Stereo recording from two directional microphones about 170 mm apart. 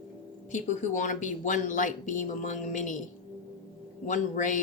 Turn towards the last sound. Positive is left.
turn(degrees=50)  # may be behind; listen again after turning